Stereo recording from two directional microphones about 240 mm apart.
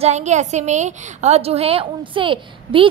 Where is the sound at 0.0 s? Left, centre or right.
Right.